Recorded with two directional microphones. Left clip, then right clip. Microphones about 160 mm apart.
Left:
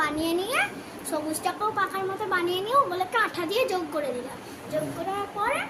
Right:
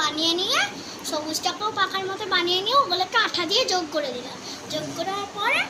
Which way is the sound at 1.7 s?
10° left (ahead or behind).